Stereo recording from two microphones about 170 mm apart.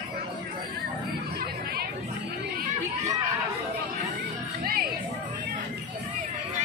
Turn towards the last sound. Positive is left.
turn(degrees=-60)  # may be behind; listen again after turning